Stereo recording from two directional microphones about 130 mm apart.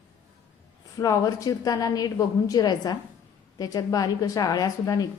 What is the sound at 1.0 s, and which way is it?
A woman's voice, 25° left (ahead or behind).